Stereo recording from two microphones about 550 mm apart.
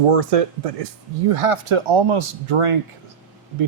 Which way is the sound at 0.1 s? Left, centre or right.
Right.